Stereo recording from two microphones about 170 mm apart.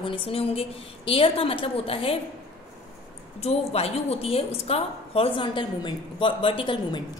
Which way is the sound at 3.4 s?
35° left (ahead or behind).